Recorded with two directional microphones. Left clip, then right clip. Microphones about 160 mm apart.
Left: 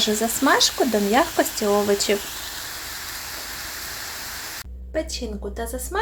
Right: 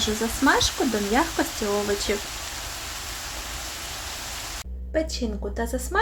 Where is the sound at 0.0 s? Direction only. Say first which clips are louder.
Left 2 dB; 40° left (ahead or behind).